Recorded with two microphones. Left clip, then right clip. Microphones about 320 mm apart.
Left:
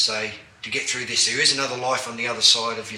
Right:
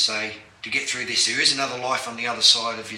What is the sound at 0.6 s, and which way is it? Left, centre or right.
Speech, centre.